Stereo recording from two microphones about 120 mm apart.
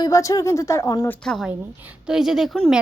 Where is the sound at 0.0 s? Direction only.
25° left (ahead or behind).